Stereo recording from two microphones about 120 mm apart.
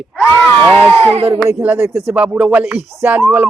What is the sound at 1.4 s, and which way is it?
Speech, 15° right (ahead or behind).